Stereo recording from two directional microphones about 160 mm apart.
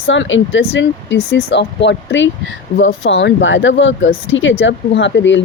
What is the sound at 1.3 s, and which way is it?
Speech, 90° left.